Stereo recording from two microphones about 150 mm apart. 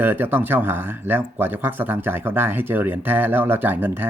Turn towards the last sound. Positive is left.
turn(degrees=-15)  # may be behind; listen again after turning